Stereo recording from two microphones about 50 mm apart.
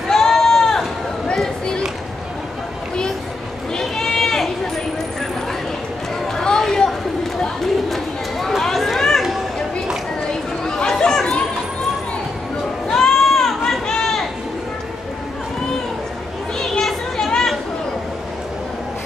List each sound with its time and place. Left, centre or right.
0.1 s sheep: centre
1.3 s a sound: centre
3.8 s sheep: centre
6.3 s crowd: centre
11.0 s chatter: centre
12.8 s a sound: centre
16.5 s children playing: centre